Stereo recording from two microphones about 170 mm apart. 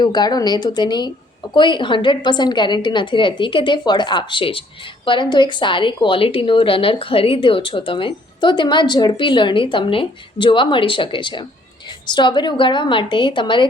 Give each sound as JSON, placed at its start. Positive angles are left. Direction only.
{"t": 0.0, "sound": "a woman's voice", "side_deg": 25}